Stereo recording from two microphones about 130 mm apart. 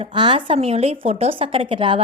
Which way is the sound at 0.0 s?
40° right (ahead or behind).